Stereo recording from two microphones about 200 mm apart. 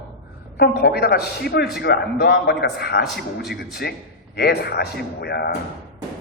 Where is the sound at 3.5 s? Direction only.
55° left (ahead or behind).